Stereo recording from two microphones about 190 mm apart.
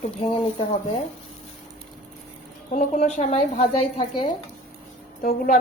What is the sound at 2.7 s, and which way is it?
Speech, 40° left (ahead or behind).